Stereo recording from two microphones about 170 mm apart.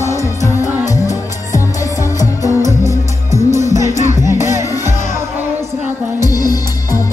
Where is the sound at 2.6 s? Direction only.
20° right (ahead or behind).